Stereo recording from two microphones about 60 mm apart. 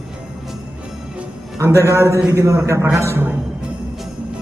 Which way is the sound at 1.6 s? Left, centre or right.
Right.